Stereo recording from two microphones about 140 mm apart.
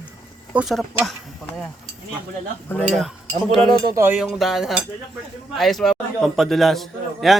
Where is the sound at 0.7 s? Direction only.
Centre (ahead or behind).